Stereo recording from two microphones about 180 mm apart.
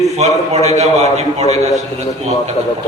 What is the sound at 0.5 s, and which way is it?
A man's voice, 40° right (ahead or behind).